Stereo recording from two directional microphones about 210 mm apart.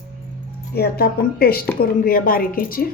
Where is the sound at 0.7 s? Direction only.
50° left (ahead or behind).